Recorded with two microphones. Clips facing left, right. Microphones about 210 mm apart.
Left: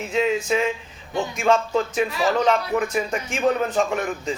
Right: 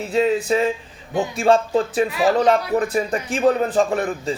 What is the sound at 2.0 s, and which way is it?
Speech, 15° right (ahead or behind).